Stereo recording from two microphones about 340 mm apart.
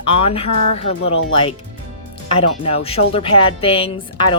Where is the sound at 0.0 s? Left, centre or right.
Centre.